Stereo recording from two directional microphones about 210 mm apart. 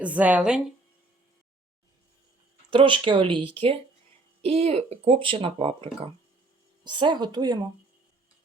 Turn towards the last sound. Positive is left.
turn(degrees=-20)  # may be behind; listen again after turning